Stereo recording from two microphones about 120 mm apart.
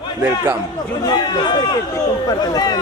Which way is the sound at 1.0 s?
35° left (ahead or behind).